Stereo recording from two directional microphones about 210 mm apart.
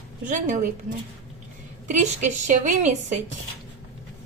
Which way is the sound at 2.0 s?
35° right (ahead or behind).